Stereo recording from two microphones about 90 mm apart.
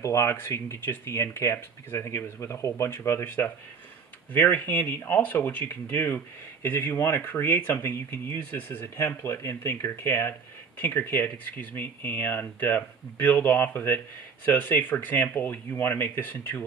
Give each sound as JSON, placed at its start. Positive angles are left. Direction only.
{"t": 0.0, "sound": "speech", "side_deg": 30}